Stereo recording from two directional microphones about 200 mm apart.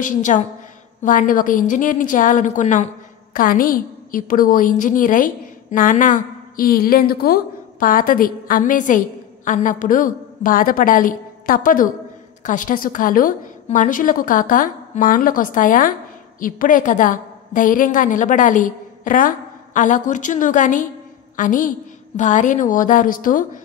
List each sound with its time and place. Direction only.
0.0 s a woman's voice: 40° left (ahead or behind)